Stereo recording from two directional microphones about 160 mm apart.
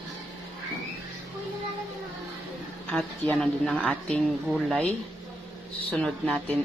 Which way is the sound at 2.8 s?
10° left (ahead or behind).